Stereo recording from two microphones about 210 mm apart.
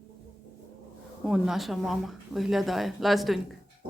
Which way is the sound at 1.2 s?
Centre (ahead or behind).